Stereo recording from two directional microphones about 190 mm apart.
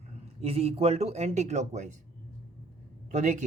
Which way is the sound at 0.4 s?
30° right (ahead or behind).